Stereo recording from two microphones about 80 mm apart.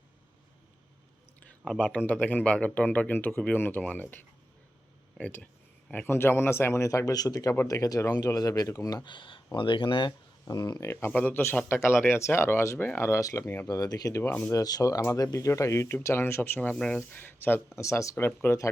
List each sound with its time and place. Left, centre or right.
1.6 s speech: centre
2.0 s speech: left
6.1 s a man's voice: left
9.0 s speech: left
10.4 s speech: left
11.1 s a man's voice: left
13.7 s speech: left
14.3 s speech: centre
14.5 s a man's voice: left
16.7 s speech: centre
17.0 s speech: left
17.7 s a man's voice: left